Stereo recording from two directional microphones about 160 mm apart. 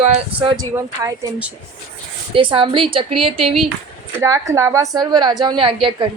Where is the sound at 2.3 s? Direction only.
30° right (ahead or behind).